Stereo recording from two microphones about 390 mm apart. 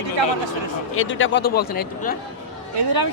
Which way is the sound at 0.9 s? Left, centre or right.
Left.